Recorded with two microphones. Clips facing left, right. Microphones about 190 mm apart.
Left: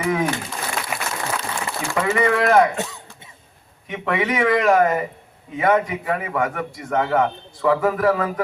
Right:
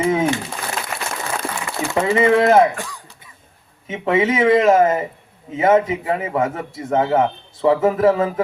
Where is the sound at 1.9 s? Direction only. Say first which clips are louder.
Right 4 dB; 25° right (ahead or behind).